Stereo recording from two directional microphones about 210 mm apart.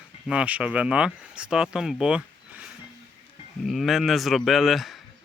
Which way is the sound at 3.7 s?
Centre (ahead or behind).